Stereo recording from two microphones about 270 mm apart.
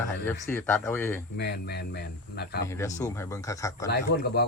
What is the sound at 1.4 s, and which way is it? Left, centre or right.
Speech, left.